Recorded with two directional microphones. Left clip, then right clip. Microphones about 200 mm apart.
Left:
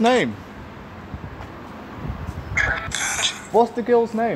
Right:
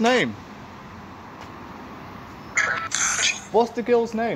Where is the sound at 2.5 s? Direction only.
15° right (ahead or behind).